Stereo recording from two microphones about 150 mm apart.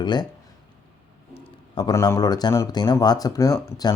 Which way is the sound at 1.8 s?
25° left (ahead or behind).